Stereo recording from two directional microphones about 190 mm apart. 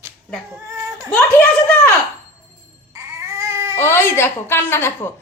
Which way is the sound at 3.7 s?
15° left (ahead or behind).